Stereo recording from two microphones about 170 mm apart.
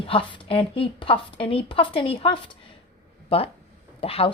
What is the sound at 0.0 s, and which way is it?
A woman's voice, 30° left (ahead or behind).